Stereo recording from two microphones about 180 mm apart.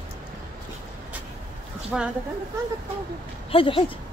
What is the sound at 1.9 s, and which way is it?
Speech, 5° right (ahead or behind).